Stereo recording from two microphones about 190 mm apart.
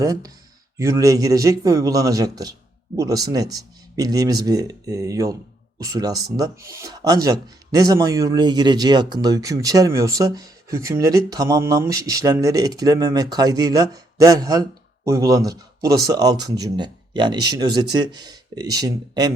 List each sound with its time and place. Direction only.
0.0 s speech: 20° right (ahead or behind)